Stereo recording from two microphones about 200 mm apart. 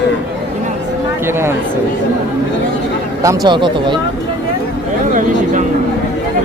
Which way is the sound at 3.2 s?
20° right (ahead or behind).